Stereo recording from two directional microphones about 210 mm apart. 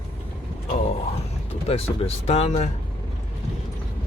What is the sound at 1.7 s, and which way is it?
Speech, 30° left (ahead or behind).